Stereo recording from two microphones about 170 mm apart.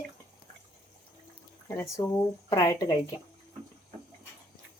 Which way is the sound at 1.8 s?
15° left (ahead or behind).